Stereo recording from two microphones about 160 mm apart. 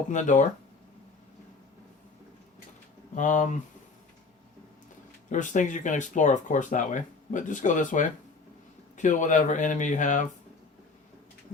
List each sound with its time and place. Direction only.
0.1 s speech: 50° left (ahead or behind)
3.2 s speech: 50° left (ahead or behind)
5.3 s speech: 50° left (ahead or behind)